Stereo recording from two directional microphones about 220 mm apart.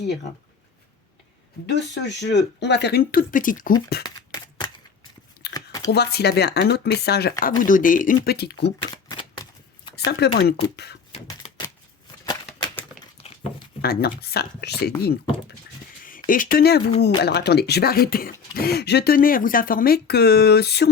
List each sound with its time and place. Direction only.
1.6 s speech: 50° left (ahead or behind)
4.0 s crumpling: 20° left (ahead or behind)
5.5 s a sound: 15° left (ahead or behind)
5.9 s speech: 45° left (ahead or behind)
8.9 s shuffling cards: 15° left (ahead or behind)
10.1 s speech: 50° left (ahead or behind)
11.1 s typewriter: 25° left (ahead or behind)
12.2 s a sound: 20° left (ahead or behind)
13.8 s speech: 45° left (ahead or behind)
16.0 s speech: 40° left (ahead or behind)